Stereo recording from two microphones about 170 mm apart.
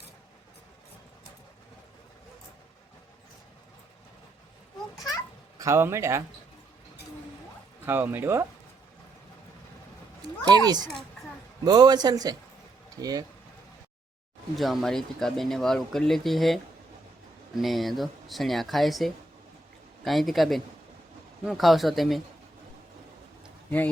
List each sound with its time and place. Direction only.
5.5 s speech: 15° right (ahead or behind)
7.9 s speech: 10° right (ahead or behind)
10.4 s speech: 25° right (ahead or behind)
14.5 s speech: centre (ahead or behind)
17.6 s speech: centre (ahead or behind)